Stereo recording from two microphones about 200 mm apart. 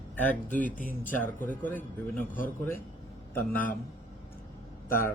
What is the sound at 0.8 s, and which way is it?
Speech, 40° left (ahead or behind).